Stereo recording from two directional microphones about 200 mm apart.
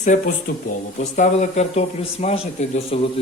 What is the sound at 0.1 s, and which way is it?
Speech, 40° left (ahead or behind).